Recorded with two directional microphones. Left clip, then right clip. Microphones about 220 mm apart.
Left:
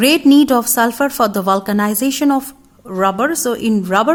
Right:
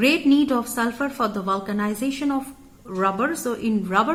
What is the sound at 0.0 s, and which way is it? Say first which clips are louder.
A woman's voice: left 8 dB; 50° left (ahead or behind).